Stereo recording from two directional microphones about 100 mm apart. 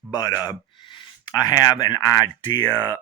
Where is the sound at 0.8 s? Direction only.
55° left (ahead or behind).